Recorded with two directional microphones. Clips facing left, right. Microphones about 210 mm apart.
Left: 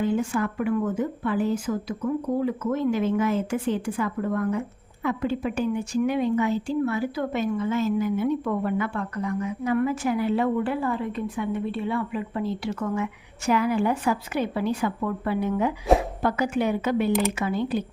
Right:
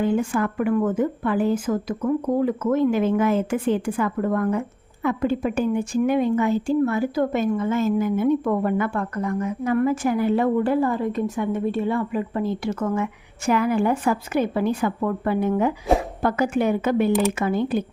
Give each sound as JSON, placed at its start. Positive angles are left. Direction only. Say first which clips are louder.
{"t": 0.0, "sound": "a woman's voice", "louder": "right 3 dB", "side_deg": -55}